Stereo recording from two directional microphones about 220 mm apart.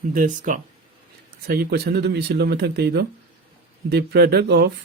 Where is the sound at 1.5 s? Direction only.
45° right (ahead or behind).